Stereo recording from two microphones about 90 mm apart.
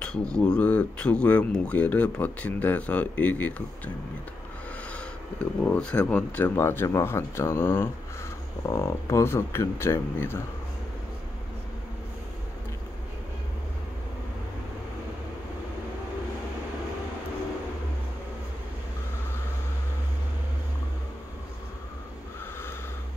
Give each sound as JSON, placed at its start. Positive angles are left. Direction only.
{"t": 0.0, "sound": "a sound", "side_deg": 10}
{"t": 0.5, "sound": "speech", "side_deg": 15}
{"t": 5.6, "sound": "speech", "side_deg": 15}